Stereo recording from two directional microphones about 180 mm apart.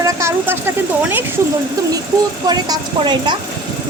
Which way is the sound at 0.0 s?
15° right (ahead or behind).